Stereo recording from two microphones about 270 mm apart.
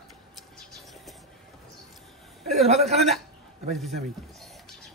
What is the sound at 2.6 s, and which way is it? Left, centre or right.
Speech, right.